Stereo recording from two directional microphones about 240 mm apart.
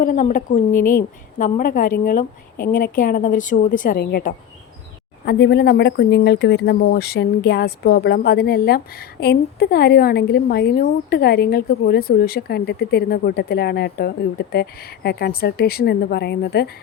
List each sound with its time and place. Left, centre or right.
0.0 s speech: left
0.7 s speech: centre
1.4 s speech: left